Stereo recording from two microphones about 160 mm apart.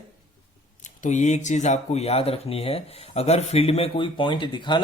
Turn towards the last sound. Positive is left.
turn(degrees=30)  # may be behind; listen again after turning